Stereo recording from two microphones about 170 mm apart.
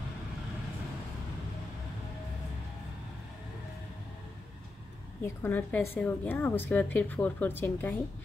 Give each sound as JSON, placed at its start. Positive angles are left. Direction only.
{"t": 5.2, "sound": "a woman's voice", "side_deg": 10}